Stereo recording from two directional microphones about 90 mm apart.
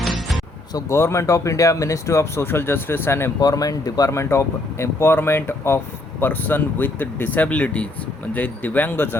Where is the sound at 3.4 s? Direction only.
45° left (ahead or behind).